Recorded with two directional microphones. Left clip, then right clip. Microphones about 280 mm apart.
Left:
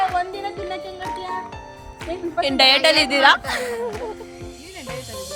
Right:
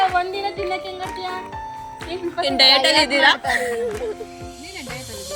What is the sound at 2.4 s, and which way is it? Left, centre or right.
A woman's voice, centre.